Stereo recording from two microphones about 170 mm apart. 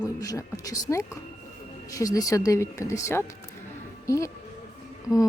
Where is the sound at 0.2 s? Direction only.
20° left (ahead or behind).